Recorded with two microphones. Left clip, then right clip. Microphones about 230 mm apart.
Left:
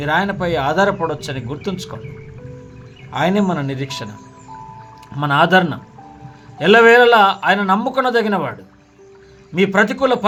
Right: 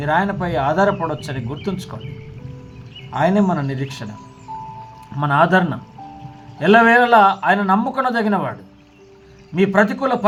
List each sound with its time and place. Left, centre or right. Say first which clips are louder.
0.0 s speech: left 1 dB; left
3.1 s speech: even; left
5.1 s speech: left 2 dB; left
9.6 s speech: left 2 dB; left